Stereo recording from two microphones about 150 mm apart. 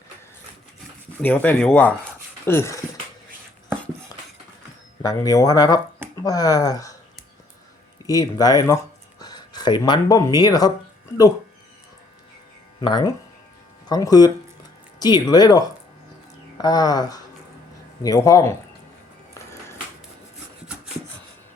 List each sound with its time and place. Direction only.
1.2 s speech: 10° left (ahead or behind)
5.0 s speech: 25° left (ahead or behind)
8.0 s speech: 25° left (ahead or behind)
12.8 s speech: 30° left (ahead or behind)